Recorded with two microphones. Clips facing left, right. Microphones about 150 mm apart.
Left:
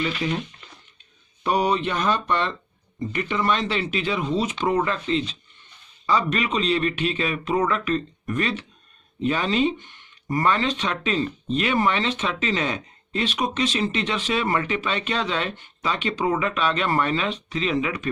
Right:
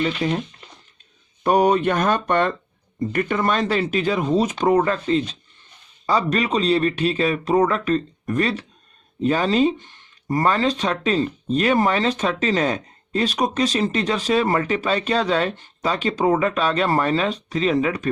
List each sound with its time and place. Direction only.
0.2 s speech: 40° right (ahead or behind)
1.5 s speech: 50° right (ahead or behind)